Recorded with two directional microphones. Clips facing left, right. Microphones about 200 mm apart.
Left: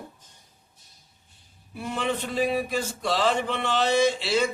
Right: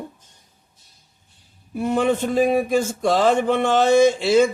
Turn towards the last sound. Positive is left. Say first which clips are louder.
# right 8 dB
turn(degrees=-50)  # may be behind; listen again after turning